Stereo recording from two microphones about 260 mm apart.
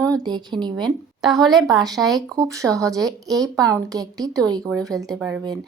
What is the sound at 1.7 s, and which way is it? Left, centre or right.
Speech, centre.